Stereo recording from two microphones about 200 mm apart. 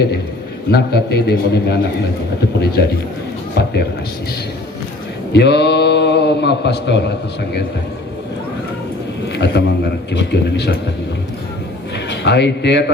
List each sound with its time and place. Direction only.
0.7 s a man's voice: 55° left (ahead or behind)
5.3 s a man's voice: 60° left (ahead or behind)
9.3 s a man's voice: 60° left (ahead or behind)
11.9 s a man's voice: 60° left (ahead or behind)